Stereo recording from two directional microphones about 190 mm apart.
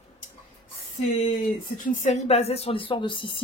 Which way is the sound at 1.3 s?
45° left (ahead or behind).